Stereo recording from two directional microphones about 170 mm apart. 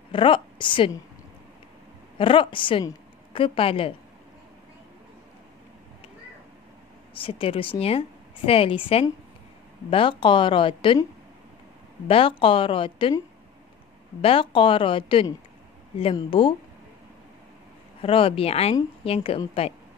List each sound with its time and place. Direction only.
0.1 s a woman's voice: 30° left (ahead or behind)
2.1 s a woman's voice: 30° left (ahead or behind)
7.2 s a woman's voice: 30° left (ahead or behind)
12.1 s a woman's voice: 30° left (ahead or behind)
14.2 s a woman's voice: 30° left (ahead or behind)
18.0 s a woman's voice: 35° left (ahead or behind)